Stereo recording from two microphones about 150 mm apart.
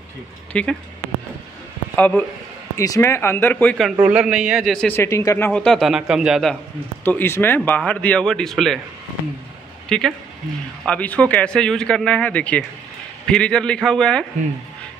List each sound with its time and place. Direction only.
0.5 s speech: 5° left (ahead or behind)
2.0 s speech: 10° left (ahead or behind)
2.8 s speech: 20° left (ahead or behind)
4.0 s a man's voice: 5° right (ahead or behind)
4.8 s speech: 15° left (ahead or behind)
5.5 s a man's voice: 5° left (ahead or behind)
7.1 s speech: 15° left (ahead or behind)
9.8 s a man's voice: 5° left (ahead or behind)